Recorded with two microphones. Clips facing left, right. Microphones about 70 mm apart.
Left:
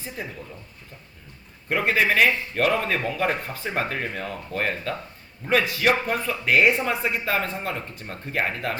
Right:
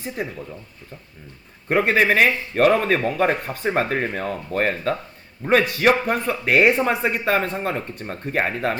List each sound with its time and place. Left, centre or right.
1.7 s a man's voice: right